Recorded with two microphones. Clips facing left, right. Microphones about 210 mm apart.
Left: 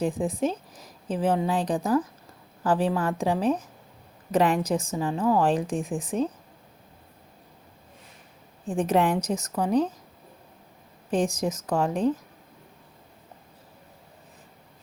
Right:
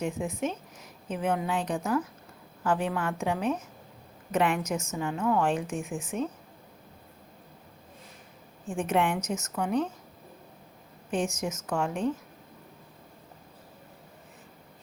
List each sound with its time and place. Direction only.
0.0 s a woman's voice: 35° left (ahead or behind)
8.6 s a woman's voice: 35° left (ahead or behind)
11.1 s a woman's voice: 35° left (ahead or behind)